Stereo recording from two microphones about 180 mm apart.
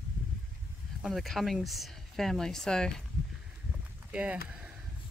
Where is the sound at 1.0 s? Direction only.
Centre (ahead or behind).